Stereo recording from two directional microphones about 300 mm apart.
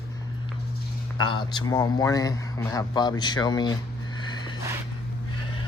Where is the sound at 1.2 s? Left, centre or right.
Centre.